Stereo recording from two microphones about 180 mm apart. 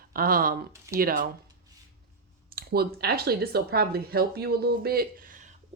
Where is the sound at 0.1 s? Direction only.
55° right (ahead or behind).